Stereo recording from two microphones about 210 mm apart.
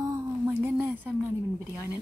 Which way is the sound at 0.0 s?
10° right (ahead or behind).